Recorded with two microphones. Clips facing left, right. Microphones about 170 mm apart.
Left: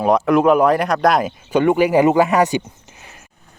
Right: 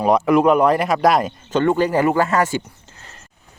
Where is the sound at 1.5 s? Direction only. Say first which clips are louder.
Left 3 dB; 10° left (ahead or behind).